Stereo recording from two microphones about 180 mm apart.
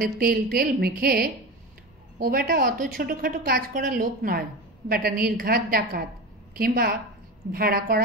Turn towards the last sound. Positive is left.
turn(degrees=-55)  # may be behind; listen again after turning